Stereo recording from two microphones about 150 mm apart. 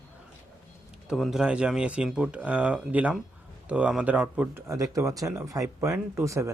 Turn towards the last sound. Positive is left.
turn(degrees=-20)  # may be behind; listen again after turning